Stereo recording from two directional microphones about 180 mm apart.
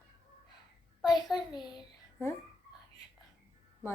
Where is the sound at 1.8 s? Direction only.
15° left (ahead or behind).